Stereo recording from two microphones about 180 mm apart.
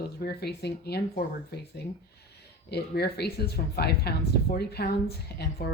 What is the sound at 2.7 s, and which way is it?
Speech, 65° left (ahead or behind).